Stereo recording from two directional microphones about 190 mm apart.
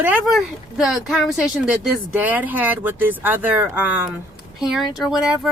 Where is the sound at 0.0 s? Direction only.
5° right (ahead or behind).